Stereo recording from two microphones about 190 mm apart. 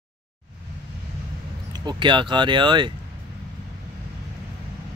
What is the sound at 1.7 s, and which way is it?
Speech, 25° right (ahead or behind).